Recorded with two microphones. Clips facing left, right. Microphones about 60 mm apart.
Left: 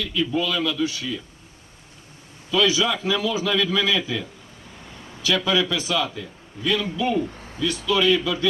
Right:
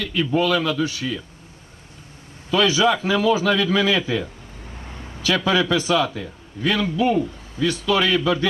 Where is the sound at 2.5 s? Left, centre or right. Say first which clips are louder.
Right 3 dB; right.